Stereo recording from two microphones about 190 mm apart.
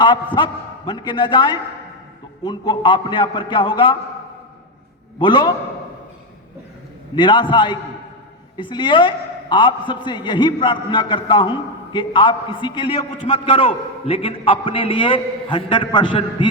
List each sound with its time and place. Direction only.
0.3 s a man's voice: 25° left (ahead or behind)
5.2 s a man's voice: 25° left (ahead or behind)
7.2 s a man's voice: 25° left (ahead or behind)